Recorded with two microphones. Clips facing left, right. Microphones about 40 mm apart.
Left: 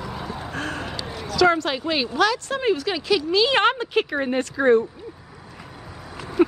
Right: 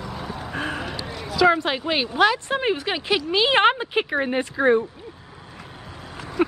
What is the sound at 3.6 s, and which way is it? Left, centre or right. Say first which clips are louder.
Speech: right 1 dB; centre.